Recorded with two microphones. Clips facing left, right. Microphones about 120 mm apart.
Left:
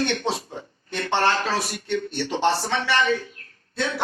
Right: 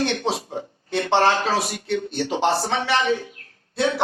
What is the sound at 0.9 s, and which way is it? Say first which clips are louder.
A man's voice: right 4 dB; 20° right (ahead or behind).